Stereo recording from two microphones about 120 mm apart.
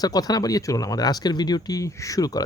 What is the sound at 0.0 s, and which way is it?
Speech, 30° left (ahead or behind).